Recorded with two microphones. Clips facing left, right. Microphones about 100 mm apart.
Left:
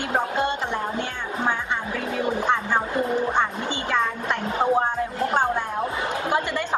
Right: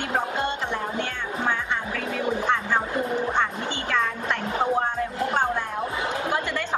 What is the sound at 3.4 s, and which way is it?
Music, 15° left (ahead or behind).